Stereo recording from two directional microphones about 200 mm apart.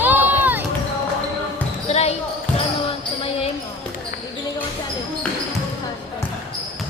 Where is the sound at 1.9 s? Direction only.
30° left (ahead or behind).